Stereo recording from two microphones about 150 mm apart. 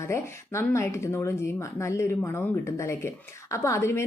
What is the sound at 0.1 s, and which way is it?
A woman's voice, 20° left (ahead or behind).